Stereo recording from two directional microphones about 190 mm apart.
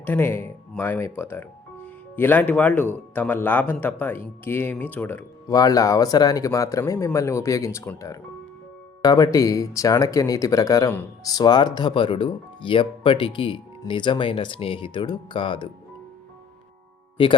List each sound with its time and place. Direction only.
0.0 s speech: 10° left (ahead or behind); by 15.7 s 25° left (ahead or behind)